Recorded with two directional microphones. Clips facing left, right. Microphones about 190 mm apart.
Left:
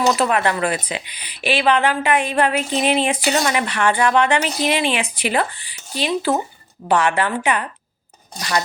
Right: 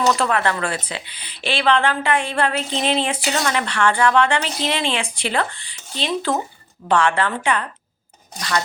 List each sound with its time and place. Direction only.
0.0 s speech: 15° left (ahead or behind)